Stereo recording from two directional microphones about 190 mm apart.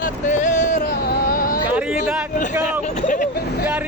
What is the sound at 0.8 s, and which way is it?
Vehicle, 55° left (ahead or behind).